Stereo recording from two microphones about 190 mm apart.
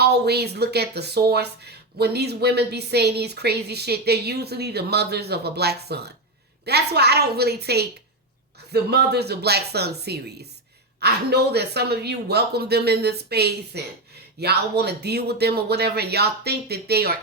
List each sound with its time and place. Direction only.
0.0 s speech: 60° right (ahead or behind)